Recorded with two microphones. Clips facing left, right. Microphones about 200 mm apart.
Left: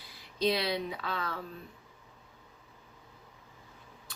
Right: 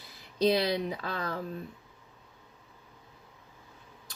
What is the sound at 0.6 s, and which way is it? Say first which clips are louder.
Speech: right 3 dB; 40° right (ahead or behind).